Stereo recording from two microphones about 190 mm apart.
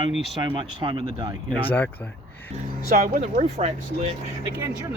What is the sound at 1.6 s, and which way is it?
Speech, 10° left (ahead or behind).